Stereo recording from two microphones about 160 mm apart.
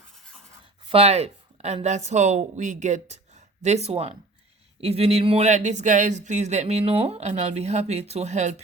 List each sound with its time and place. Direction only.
0.9 s a woman's voice: 40° right (ahead or behind)